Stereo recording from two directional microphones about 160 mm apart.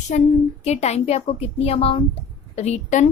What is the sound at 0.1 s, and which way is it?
Speech, 55° left (ahead or behind).